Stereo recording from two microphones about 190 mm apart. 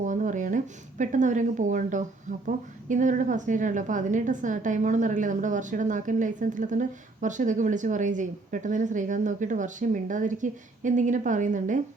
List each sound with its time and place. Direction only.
0.0 s a woman's voice: 40° right (ahead or behind)